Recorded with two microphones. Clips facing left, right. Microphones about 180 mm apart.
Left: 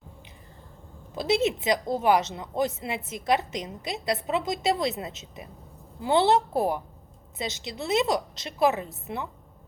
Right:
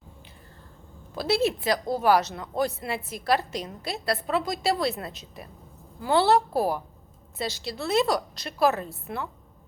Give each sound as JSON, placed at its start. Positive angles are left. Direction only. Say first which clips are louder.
{"t": 1.1, "sound": "a woman's voice", "louder": "even", "side_deg": 20}